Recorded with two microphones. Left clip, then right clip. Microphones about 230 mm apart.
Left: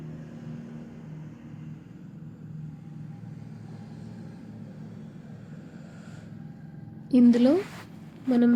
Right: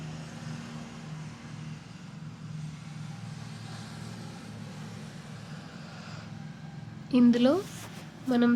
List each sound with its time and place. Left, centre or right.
7.1 s a woman's voice: centre